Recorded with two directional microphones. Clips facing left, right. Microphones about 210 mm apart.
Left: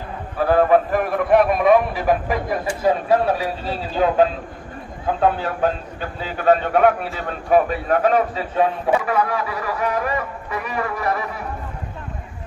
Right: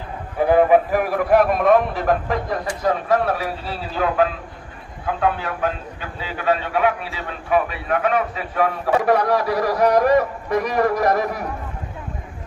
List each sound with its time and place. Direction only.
0.4 s a man's voice: 15° right (ahead or behind); by 3.4 s 15° left (ahead or behind)
3.9 s a man's voice: 25° left (ahead or behind)
9.0 s a man's voice: 40° right (ahead or behind)